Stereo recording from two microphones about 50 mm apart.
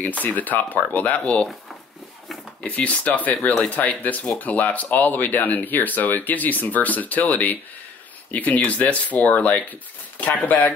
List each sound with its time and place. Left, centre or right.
0.0 s speech: left
2.6 s speech: left